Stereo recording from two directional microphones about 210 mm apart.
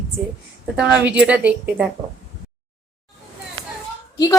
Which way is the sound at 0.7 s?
5° right (ahead or behind).